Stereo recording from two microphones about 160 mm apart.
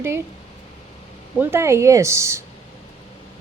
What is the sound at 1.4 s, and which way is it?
Speech, 15° right (ahead or behind).